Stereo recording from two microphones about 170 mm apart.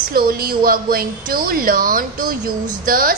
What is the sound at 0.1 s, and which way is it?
A woman's voice, 60° right (ahead or behind).